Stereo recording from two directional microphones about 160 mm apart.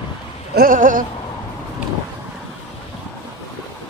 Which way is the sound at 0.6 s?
60° right (ahead or behind).